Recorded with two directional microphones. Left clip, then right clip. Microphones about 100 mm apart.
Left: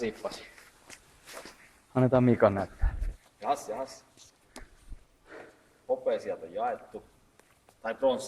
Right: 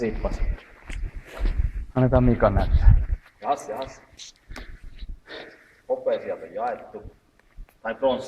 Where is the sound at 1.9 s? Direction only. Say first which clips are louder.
Right 4 dB; 35° left (ahead or behind).